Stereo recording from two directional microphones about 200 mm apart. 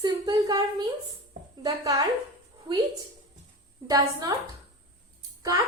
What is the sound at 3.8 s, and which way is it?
Speech, 20° right (ahead or behind).